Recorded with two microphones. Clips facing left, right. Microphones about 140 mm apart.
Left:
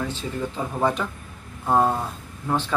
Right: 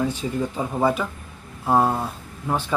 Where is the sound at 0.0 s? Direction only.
10° right (ahead or behind).